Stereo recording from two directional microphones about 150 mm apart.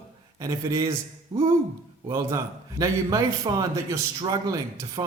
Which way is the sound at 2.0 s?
25° right (ahead or behind).